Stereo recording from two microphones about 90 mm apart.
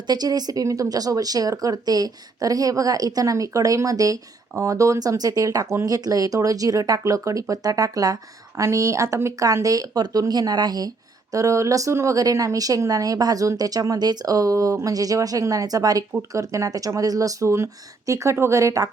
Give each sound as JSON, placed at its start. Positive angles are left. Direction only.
{"t": 0.1, "sound": "speech", "side_deg": -50}